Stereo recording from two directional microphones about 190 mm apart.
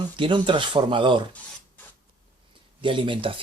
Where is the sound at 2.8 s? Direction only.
25° right (ahead or behind).